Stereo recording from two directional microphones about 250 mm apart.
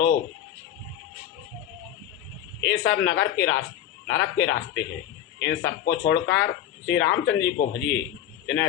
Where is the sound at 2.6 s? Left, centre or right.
Left.